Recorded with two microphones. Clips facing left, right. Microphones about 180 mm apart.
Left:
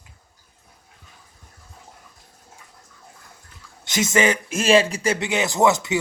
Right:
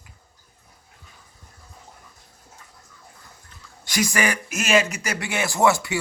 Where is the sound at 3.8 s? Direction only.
25° left (ahead or behind).